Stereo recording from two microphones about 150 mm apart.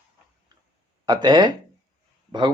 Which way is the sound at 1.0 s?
30° right (ahead or behind).